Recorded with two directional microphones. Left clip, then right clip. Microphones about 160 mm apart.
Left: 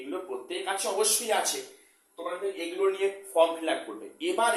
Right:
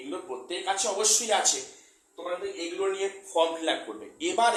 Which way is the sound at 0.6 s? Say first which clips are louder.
Right 2 dB; 20° right (ahead or behind).